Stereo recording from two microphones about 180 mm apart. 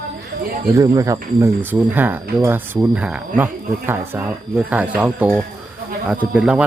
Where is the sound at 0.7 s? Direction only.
20° right (ahead or behind).